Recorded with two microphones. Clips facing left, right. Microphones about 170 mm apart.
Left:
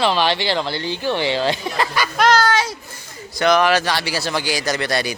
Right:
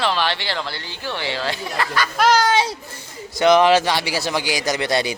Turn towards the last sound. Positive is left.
turn(degrees=-20)  # may be behind; listen again after turning